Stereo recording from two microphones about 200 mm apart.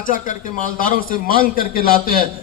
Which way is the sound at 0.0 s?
40° left (ahead or behind).